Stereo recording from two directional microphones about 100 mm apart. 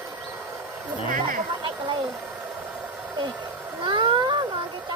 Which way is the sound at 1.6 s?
55° right (ahead or behind).